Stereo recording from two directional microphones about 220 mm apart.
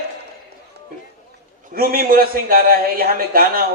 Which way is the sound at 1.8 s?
40° right (ahead or behind).